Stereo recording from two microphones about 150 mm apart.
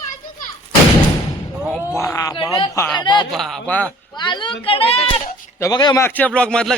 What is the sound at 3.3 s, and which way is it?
Speech, centre (ahead or behind).